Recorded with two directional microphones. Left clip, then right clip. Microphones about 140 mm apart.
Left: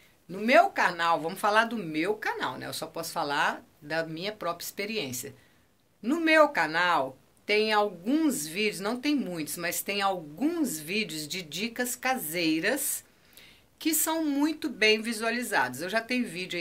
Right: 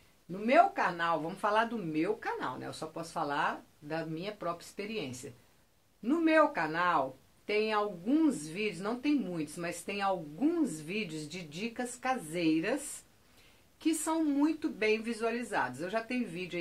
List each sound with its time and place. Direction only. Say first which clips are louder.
0.3 s speech: left 4 dB; 15° left (ahead or behind)
13.7 s speech: left 3 dB; 10° left (ahead or behind)